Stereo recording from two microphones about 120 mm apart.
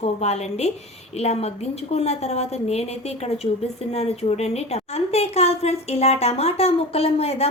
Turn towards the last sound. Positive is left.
turn(degrees=55)  # may be behind; listen again after turning